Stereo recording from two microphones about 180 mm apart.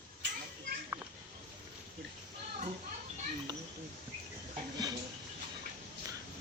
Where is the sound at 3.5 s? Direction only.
25° right (ahead or behind).